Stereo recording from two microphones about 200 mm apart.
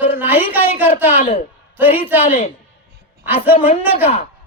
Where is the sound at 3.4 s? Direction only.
10° right (ahead or behind).